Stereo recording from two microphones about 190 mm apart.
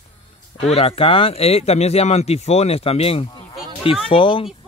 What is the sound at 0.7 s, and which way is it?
A man's voice, 30° left (ahead or behind).